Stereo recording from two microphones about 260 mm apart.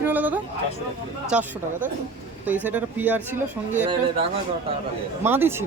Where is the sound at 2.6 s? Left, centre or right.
Centre.